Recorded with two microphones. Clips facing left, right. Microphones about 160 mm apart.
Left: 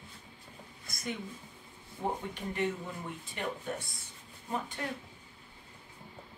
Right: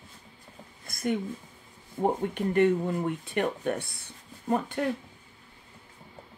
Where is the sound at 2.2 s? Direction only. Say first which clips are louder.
Right 11 dB; 60° right (ahead or behind).